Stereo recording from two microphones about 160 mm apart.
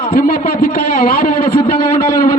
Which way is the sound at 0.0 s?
60° left (ahead or behind).